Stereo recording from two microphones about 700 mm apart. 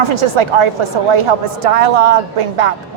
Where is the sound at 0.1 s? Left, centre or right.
Right.